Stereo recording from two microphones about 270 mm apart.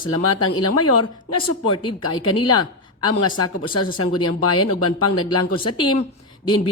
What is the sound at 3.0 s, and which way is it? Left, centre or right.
Speech, left.